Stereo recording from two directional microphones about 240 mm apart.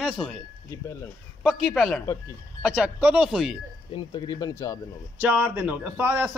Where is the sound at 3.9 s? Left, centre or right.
Centre.